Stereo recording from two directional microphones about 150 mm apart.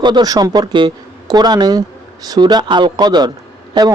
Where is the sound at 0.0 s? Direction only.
30° right (ahead or behind).